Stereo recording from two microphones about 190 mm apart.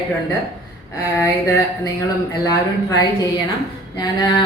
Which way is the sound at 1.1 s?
15° left (ahead or behind).